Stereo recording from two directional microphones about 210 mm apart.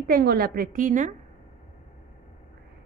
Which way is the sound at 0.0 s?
45° right (ahead or behind).